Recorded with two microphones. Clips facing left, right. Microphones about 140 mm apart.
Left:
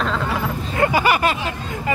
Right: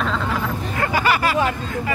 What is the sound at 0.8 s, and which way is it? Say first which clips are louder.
Speech: left 3 dB; 20° left (ahead or behind).